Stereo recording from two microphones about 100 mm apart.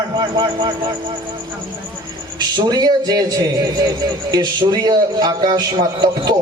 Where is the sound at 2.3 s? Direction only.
45° right (ahead or behind).